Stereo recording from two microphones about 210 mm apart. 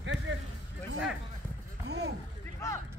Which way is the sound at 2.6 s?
15° left (ahead or behind).